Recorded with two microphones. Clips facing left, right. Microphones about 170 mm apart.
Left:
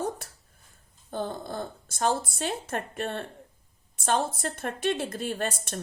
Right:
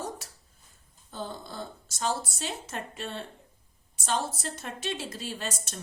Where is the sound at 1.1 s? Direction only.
55° left (ahead or behind).